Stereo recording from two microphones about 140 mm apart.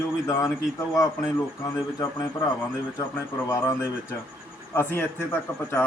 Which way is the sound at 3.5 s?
20° left (ahead or behind).